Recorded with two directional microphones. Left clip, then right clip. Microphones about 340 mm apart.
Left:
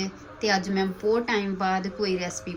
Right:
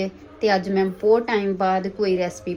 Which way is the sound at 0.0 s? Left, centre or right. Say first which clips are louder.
Right 6 dB; centre.